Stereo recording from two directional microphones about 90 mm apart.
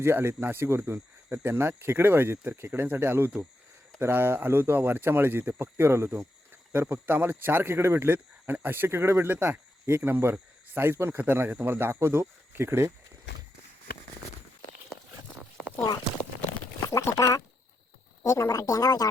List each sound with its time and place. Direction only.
0.0 s speech: 25° right (ahead or behind)
0.9 s cricket: 25° right (ahead or behind)
1.5 s speech: 25° right (ahead or behind)
16.9 s speech: 35° left (ahead or behind)